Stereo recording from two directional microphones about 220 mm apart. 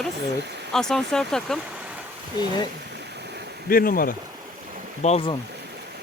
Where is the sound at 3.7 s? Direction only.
40° left (ahead or behind).